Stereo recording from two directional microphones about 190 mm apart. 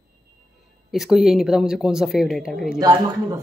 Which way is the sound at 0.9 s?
Centre (ahead or behind).